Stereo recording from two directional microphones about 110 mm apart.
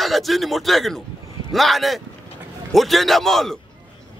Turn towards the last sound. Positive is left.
turn(degrees=0)  # may be behind; listen again after turning